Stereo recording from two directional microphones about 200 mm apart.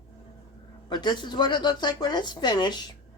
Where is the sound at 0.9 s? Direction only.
20° left (ahead or behind).